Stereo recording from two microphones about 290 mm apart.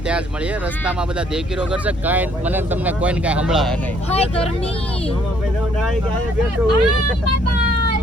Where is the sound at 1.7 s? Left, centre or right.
Centre.